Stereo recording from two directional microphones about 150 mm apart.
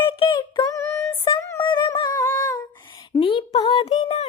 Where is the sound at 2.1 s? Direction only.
15° left (ahead or behind).